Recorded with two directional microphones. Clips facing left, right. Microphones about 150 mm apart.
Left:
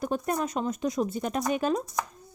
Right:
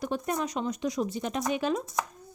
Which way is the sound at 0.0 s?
45° left (ahead or behind).